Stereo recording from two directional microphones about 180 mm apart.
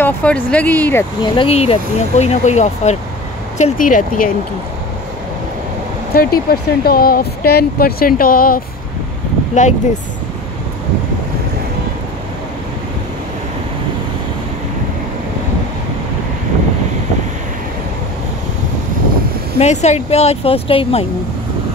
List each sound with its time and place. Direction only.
0.0 s speech: 5° left (ahead or behind)
1.2 s speech: 30° left (ahead or behind); by 4.3 s 50° left (ahead or behind)
6.1 s speech: 55° left (ahead or behind)
9.5 s speech: 40° left (ahead or behind)
19.6 s speech: 40° left (ahead or behind)